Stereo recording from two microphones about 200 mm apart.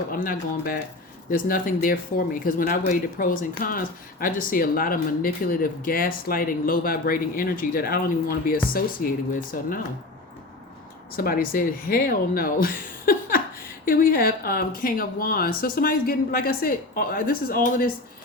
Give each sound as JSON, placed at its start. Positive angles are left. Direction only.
{"t": 0.1, "sound": "speech", "side_deg": 45}
{"t": 11.2, "sound": "speech", "side_deg": 45}